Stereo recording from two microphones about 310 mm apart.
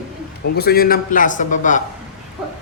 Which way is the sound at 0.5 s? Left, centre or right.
Left.